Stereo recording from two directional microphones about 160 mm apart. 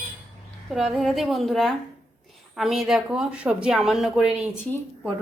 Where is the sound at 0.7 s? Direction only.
Centre (ahead or behind).